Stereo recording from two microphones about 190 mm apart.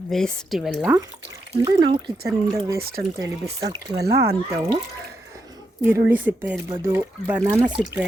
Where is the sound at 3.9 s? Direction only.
55° right (ahead or behind).